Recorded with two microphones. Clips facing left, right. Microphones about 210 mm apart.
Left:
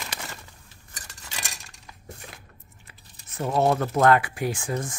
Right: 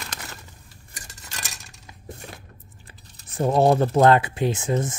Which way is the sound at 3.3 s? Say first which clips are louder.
Right 4 dB; 30° right (ahead or behind).